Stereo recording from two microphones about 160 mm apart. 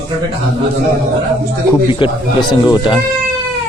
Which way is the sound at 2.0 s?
30° left (ahead or behind).